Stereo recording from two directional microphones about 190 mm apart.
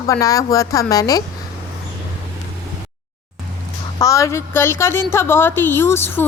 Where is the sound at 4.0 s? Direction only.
15° left (ahead or behind).